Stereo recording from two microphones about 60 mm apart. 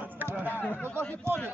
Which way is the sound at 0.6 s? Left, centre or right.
Left.